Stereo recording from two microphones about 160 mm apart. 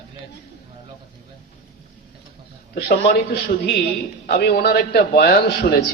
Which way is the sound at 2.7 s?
85° left.